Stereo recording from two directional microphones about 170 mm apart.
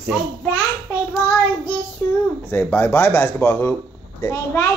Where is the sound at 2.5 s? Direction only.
10° left (ahead or behind).